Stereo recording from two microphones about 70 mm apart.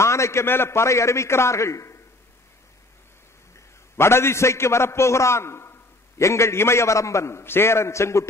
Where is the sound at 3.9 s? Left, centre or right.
Left.